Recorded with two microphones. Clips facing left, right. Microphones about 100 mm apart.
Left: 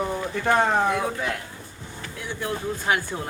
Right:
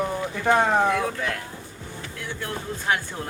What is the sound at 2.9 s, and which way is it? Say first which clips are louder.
Speech: left 1 dB; 10° left (ahead or behind).